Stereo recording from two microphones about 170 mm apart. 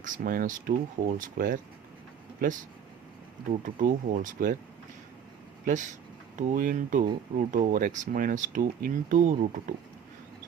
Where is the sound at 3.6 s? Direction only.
50° right (ahead or behind).